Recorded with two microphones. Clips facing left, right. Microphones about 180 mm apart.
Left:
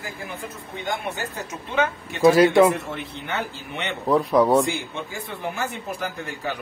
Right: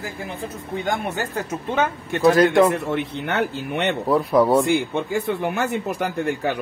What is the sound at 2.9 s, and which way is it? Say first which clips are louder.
Speech: right 6 dB; 60° right (ahead or behind).